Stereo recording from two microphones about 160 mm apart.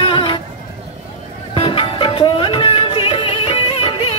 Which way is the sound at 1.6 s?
35° left (ahead or behind).